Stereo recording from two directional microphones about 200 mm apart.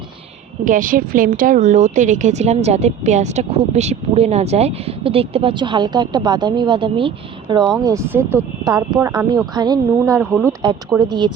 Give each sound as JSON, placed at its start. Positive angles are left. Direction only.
{"t": 0.6, "sound": "a woman's voice", "side_deg": -40}